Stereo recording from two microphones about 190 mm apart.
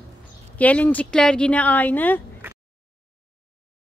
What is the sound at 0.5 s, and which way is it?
Speech, 5° left (ahead or behind).